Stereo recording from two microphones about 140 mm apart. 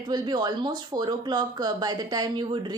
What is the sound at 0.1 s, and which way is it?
Speech, 30° right (ahead or behind).